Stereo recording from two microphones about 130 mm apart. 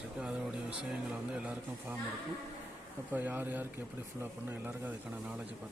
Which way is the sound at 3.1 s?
15° right (ahead or behind).